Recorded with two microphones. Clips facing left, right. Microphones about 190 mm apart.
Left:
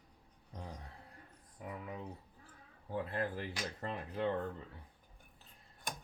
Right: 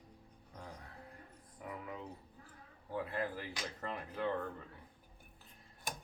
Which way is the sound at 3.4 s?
20° left (ahead or behind).